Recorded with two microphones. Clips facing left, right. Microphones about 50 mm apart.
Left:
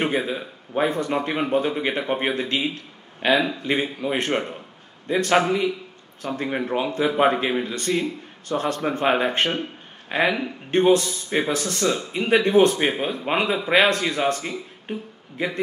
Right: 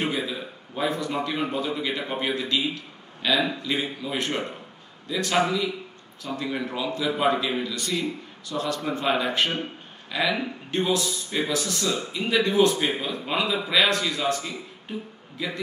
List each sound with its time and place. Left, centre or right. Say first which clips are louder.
0.0 s a man's voice: left 4 dB; left